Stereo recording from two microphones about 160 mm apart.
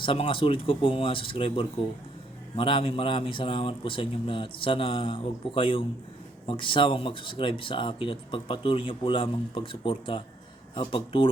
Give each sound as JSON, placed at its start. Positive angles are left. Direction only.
{"t": 0.0, "sound": "speech", "side_deg": 35}